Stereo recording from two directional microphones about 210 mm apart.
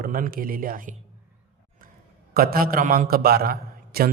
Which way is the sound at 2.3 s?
45° right (ahead or behind).